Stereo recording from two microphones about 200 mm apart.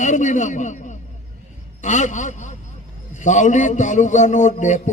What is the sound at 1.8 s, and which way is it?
A man's voice, 40° left (ahead or behind).